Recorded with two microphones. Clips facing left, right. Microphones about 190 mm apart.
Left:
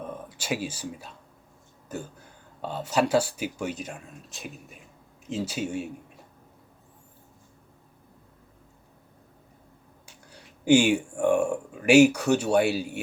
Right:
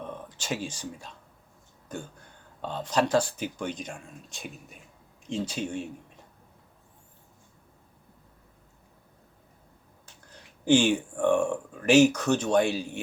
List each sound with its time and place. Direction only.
0.0 s speech: 10° left (ahead or behind)
10.1 s speech: 10° left (ahead or behind)